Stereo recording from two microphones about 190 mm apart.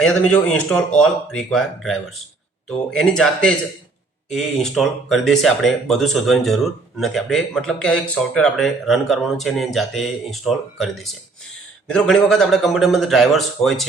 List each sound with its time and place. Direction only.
0.0 s speech: 5° left (ahead or behind)